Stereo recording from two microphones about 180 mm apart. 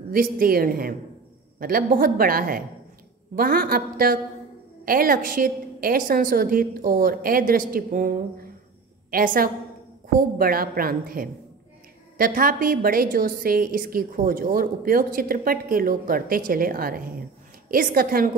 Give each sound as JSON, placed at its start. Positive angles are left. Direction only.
{"t": 0.1, "sound": "a woman's voice", "side_deg": -55}